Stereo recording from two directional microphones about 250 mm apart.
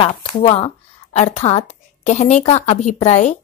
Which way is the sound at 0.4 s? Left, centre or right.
Left.